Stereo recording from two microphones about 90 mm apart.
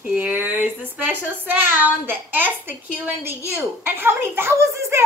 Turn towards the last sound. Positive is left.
turn(degrees=-30)  # may be behind; listen again after turning